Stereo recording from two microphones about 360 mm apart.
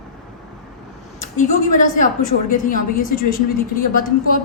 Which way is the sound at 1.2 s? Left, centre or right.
Centre.